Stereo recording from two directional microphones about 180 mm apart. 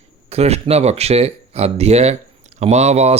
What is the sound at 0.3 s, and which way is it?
Speech, 35° right (ahead or behind).